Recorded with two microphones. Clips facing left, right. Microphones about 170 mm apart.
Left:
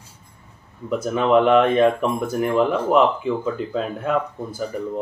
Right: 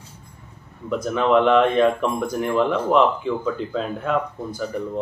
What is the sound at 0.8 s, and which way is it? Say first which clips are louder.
Speech: left 1 dB; 5° left (ahead or behind).